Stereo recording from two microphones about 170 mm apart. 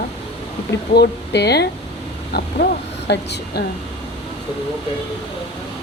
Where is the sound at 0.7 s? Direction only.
80° left.